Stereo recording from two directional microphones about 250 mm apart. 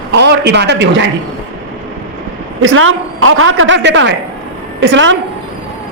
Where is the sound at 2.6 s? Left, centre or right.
Right.